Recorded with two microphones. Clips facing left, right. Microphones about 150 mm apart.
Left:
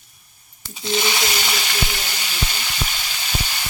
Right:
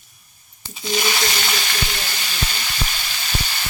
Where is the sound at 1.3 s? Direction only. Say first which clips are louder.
Even; 10° left (ahead or behind).